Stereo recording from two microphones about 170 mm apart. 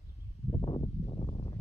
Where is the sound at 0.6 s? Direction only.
25° left (ahead or behind).